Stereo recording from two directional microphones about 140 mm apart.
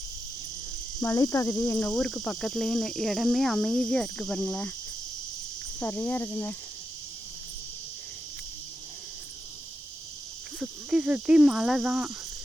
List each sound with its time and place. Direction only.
1.0 s insect: 25° left (ahead or behind)
2.0 s insect: 5° left (ahead or behind)
5.8 s cricket: 15° left (ahead or behind)
10.6 s cricket: 5° right (ahead or behind)